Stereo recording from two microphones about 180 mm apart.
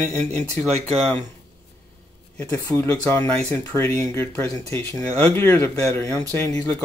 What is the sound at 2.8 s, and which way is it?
Speech, 10° left (ahead or behind).